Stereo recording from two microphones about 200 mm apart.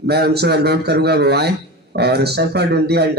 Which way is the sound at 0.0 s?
55° right (ahead or behind).